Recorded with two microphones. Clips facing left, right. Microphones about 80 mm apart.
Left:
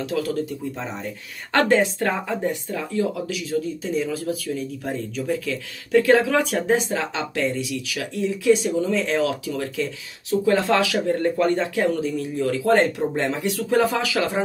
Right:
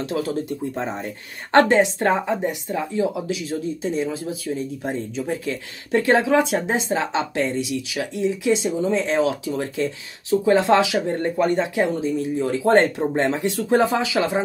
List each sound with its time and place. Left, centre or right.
0.0 s speech: right